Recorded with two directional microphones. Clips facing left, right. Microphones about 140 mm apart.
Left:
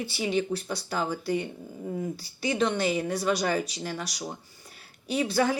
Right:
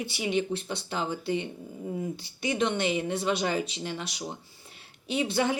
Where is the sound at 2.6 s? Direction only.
20° right (ahead or behind).